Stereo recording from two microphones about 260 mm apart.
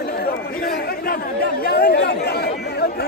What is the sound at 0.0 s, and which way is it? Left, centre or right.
Chatter, left.